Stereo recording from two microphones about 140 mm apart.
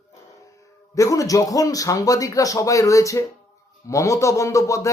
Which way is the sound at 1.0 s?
25° left (ahead or behind).